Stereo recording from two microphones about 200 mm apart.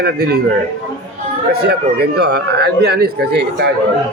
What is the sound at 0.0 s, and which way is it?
Speech, 55° right (ahead or behind).